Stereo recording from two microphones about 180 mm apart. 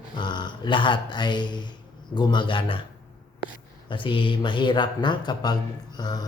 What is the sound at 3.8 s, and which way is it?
Speech, 25° left (ahead or behind).